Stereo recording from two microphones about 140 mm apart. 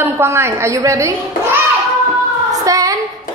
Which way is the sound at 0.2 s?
20° right (ahead or behind).